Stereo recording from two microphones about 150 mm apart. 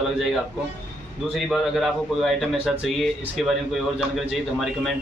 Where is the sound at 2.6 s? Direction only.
Centre (ahead or behind).